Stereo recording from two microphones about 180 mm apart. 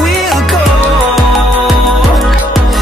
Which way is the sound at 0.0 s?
Centre (ahead or behind).